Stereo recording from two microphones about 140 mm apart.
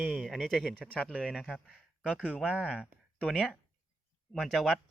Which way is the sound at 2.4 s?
5° right (ahead or behind).